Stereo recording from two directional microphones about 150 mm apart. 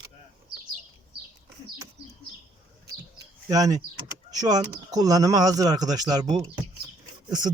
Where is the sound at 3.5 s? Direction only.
25° right (ahead or behind).